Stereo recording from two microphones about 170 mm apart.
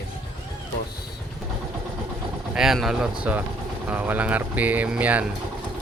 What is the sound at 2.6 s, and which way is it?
Speech, centre (ahead or behind).